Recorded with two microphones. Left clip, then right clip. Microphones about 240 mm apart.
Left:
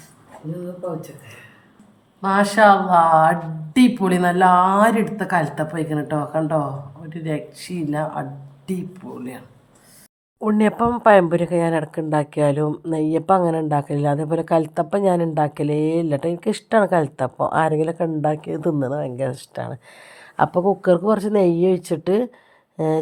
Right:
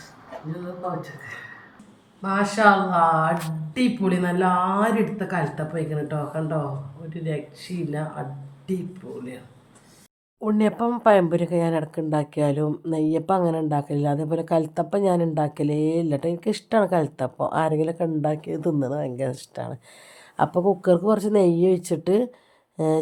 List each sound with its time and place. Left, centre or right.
2.2 s a woman's voice: left
7.1 s a woman's voice: left
10.4 s speech: centre